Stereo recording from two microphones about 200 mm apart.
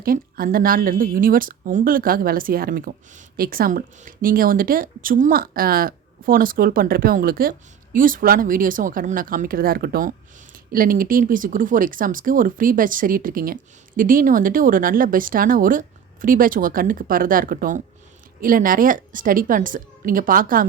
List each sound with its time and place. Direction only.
0.0 s speech: 45° right (ahead or behind)